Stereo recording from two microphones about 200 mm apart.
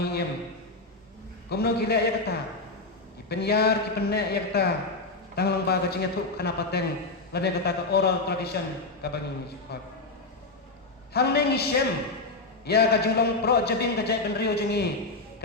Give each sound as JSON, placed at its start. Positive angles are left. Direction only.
{"t": 0.0, "sound": "a sound", "side_deg": 55}
{"t": 1.5, "sound": "a man's voice", "side_deg": 55}
{"t": 11.1, "sound": "a man's voice", "side_deg": 55}
{"t": 12.6, "sound": "a man's voice", "side_deg": 55}